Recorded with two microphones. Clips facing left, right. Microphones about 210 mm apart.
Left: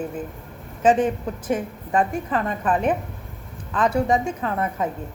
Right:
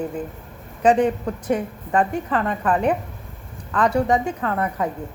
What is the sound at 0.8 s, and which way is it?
A woman's voice, 20° left (ahead or behind).